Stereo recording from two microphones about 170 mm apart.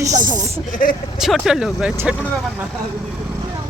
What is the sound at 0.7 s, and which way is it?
Speech, 55° left (ahead or behind).